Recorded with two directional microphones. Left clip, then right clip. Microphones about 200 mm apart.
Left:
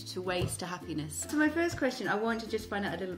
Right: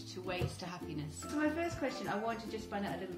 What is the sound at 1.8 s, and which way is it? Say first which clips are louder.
Speech: left 6 dB; 45° left (ahead or behind).